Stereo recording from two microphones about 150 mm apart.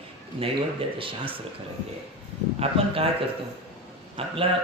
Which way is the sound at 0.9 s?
35° right (ahead or behind).